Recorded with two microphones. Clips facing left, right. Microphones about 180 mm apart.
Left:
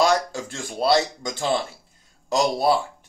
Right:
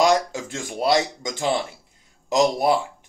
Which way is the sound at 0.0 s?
20° right (ahead or behind).